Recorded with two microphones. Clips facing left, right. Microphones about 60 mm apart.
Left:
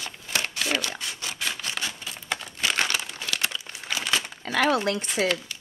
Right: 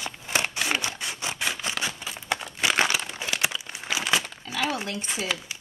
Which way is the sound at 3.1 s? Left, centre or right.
Centre.